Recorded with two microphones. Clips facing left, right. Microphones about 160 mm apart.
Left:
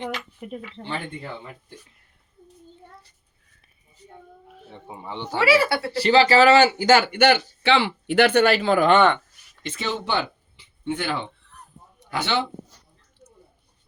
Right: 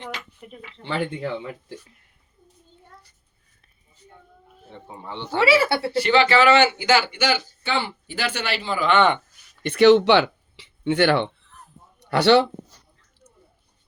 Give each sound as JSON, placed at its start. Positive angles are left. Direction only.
{"t": 0.4, "sound": "speech", "side_deg": 60}
{"t": 0.8, "sound": "speech", "side_deg": -70}
{"t": 4.9, "sound": "speech", "side_deg": 10}
{"t": 5.4, "sound": "speech", "side_deg": -25}
{"t": 5.9, "sound": "a man's voice", "side_deg": 35}
{"t": 9.6, "sound": "speech", "side_deg": -70}